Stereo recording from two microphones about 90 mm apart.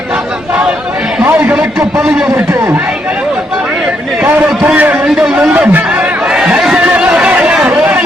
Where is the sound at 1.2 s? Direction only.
25° right (ahead or behind).